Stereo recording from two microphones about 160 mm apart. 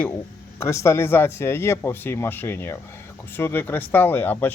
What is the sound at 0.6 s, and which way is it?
Speech, 15° left (ahead or behind).